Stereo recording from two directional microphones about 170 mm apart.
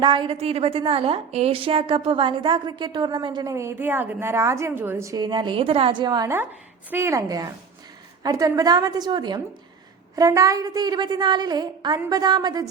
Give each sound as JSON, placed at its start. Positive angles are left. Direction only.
{"t": 0.0, "sound": "a woman's voice", "side_deg": -30}